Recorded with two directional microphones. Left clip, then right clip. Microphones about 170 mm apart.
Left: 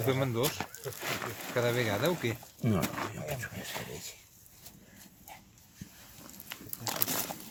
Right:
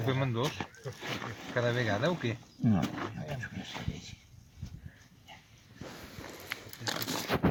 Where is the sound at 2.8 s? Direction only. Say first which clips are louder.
Left 2 dB; 20° left (ahead or behind).